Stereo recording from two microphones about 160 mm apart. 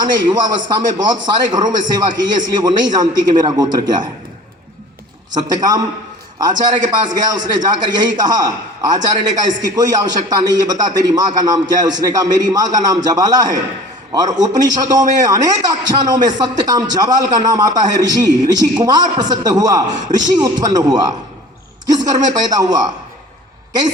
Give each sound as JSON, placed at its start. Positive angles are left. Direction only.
{"t": 0.0, "sound": "a man's voice", "side_deg": -25}
{"t": 5.3, "sound": "a man's voice", "side_deg": -25}
{"t": 19.9, "sound": "a man's voice", "side_deg": -50}
{"t": 20.4, "sound": "a man's voice", "side_deg": -25}